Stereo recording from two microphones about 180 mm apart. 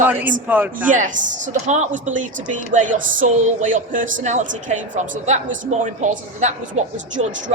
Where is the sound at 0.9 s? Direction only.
45° right (ahead or behind).